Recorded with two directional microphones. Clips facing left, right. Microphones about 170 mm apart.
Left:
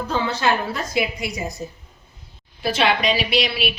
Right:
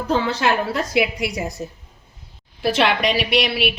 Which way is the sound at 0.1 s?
85° right.